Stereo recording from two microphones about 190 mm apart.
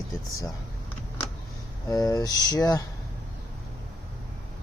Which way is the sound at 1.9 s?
20° left (ahead or behind).